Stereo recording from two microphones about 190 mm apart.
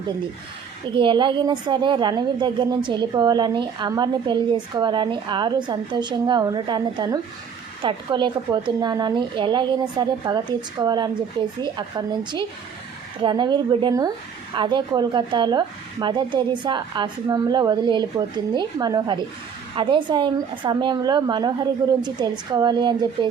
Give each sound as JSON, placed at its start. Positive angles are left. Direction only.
{"t": 0.9, "sound": "a woman's voice", "side_deg": -25}